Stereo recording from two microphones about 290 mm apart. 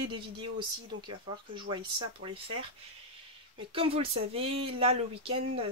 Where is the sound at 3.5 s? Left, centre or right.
Centre.